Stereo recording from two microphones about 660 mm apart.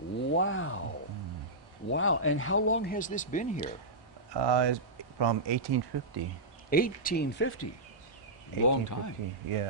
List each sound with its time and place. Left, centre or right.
0.3 s a sound: centre
1.9 s speech: centre
4.3 s speech: right
6.7 s speech: centre
8.6 s speech: left